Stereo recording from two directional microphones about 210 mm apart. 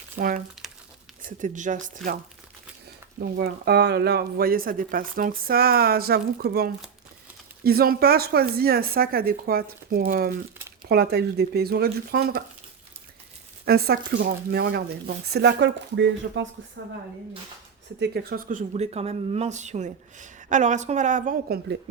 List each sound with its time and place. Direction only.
0.2 s speech: 40° right (ahead or behind)
2.0 s speech: centre (ahead or behind)
3.2 s speech: 50° right (ahead or behind)
13.7 s a woman's voice: 45° right (ahead or behind)
18.0 s speech: 45° right (ahead or behind)